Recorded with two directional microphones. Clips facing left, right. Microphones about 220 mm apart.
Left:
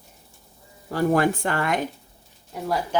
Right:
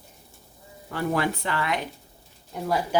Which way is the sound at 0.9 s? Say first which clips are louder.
Left 5 dB; 50° left (ahead or behind).